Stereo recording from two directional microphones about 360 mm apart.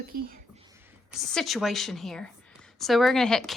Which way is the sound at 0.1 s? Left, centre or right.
Right.